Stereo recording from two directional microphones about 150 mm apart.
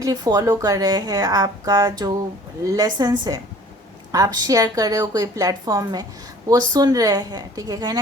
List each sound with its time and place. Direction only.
0.0 s speech: 25° right (ahead or behind)